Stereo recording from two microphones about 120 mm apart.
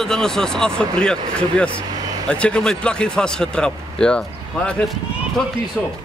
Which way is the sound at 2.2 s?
10° left (ahead or behind).